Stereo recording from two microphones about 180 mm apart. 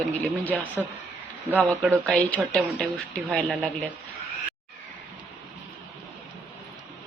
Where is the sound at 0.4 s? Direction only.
10° left (ahead or behind).